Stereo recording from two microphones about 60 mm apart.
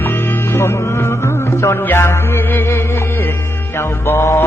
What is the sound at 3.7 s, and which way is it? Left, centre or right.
Music, left.